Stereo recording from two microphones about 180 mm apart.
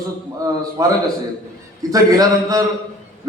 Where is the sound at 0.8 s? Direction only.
20° right (ahead or behind).